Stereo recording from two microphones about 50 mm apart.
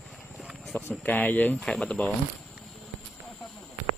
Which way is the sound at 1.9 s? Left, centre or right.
Centre.